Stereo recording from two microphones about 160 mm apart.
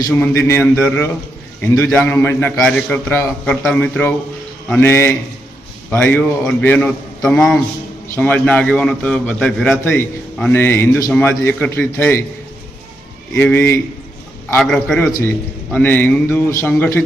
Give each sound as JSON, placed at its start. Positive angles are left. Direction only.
{"t": 0.1, "sound": "a man's voice", "side_deg": 15}
{"t": 10.5, "sound": "a man's voice", "side_deg": 15}
{"t": 13.3, "sound": "a man's voice", "side_deg": 15}
{"t": 14.5, "sound": "a man's voice", "side_deg": 5}